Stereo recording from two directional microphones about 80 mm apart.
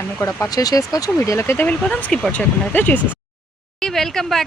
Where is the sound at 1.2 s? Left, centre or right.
Left.